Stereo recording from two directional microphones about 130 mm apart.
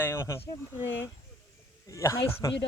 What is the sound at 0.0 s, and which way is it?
Speech, 20° left (ahead or behind).